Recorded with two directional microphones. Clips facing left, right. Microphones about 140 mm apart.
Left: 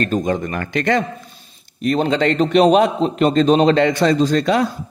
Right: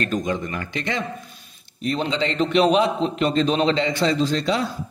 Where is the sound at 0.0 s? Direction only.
45° left (ahead or behind).